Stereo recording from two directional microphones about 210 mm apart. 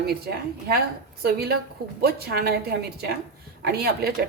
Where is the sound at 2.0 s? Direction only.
45° right (ahead or behind).